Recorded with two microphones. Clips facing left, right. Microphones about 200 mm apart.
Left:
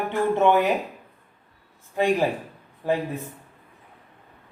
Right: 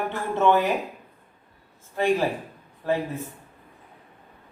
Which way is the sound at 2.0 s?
15° left (ahead or behind).